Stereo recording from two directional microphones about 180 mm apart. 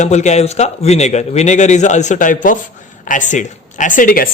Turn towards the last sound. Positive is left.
turn(degrees=50)  # may be behind; listen again after turning